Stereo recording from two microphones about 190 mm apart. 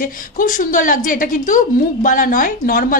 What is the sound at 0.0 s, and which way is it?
A woman's voice, 45° left (ahead or behind).